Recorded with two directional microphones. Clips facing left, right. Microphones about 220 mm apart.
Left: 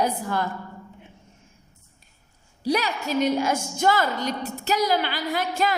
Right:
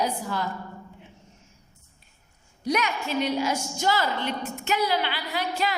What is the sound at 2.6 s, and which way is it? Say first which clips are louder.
A woman's voice: left 2 dB; 35° left (ahead or behind).